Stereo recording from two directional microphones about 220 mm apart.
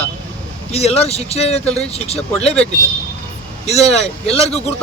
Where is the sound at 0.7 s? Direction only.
30° left (ahead or behind).